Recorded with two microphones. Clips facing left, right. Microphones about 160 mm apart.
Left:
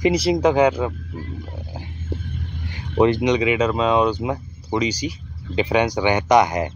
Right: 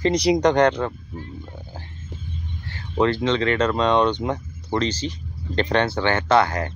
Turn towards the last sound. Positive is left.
turn(degrees=15)  # may be behind; listen again after turning